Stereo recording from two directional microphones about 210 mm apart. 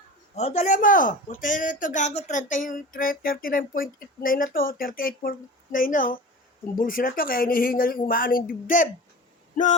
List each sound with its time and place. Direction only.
0.3 s speech: 30° left (ahead or behind)